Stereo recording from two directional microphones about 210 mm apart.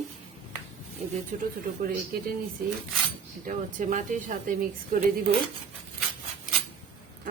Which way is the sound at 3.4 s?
40° right (ahead or behind).